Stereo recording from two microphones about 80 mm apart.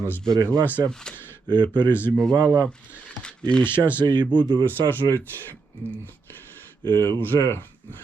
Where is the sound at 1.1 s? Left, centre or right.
Left.